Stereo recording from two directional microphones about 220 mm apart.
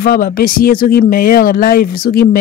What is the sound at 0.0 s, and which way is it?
Speech, 40° left (ahead or behind).